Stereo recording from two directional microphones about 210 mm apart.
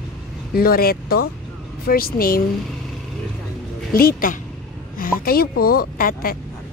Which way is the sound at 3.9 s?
45° left (ahead or behind).